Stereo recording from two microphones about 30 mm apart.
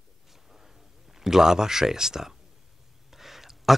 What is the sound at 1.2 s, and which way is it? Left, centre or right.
Speech, centre.